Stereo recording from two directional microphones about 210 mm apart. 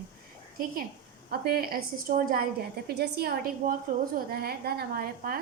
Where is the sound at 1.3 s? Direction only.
50° right (ahead or behind).